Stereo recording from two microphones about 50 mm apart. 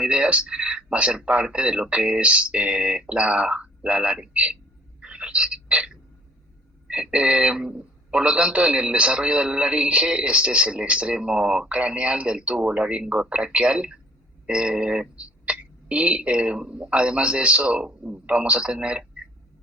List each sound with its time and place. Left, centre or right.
0.0 s a man's voice: right
4.9 s a sound: right
6.9 s a man's voice: right